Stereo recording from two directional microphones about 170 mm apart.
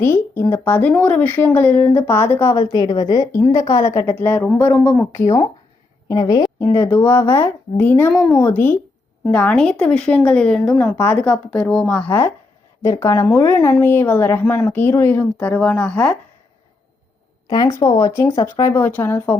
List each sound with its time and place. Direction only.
0.0 s speech: 15° left (ahead or behind)
6.1 s a woman's voice: 25° left (ahead or behind)
6.9 s speech: 10° left (ahead or behind)
17.5 s speech: 20° left (ahead or behind)